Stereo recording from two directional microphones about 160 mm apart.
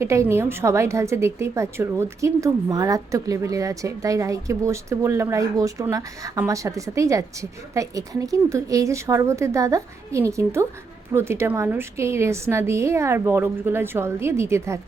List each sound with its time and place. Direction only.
0.0 s a woman's voice: 20° right (ahead or behind)